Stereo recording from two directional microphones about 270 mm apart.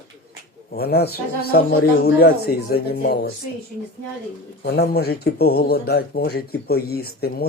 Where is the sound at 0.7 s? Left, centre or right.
Left.